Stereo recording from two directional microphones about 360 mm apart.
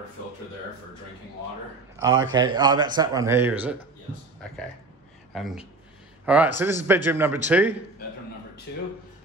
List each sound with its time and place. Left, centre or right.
2.0 s a man's voice: right
2.3 s speech: centre
5.3 s a man's voice: centre